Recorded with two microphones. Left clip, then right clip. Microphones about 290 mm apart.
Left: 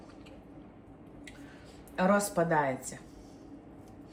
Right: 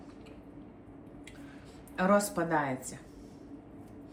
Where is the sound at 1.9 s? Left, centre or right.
Centre.